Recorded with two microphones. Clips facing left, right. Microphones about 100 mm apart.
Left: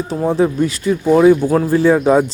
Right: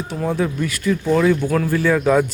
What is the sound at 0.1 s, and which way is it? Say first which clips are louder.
Speech: left 6 dB; 30° left (ahead or behind).